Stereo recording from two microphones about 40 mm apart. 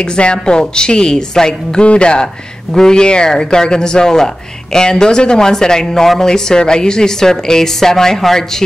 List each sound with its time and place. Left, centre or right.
0.0 s a woman's voice: left